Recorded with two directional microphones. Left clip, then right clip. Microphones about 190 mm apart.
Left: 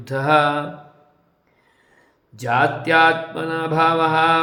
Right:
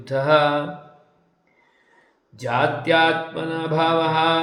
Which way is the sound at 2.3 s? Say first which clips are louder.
Left 3 dB; 20° left (ahead or behind).